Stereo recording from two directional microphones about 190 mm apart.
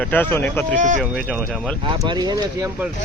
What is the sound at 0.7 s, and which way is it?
Speech, 40° right (ahead or behind).